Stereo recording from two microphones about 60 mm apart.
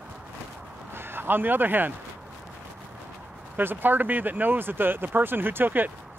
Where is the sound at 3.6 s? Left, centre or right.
Right.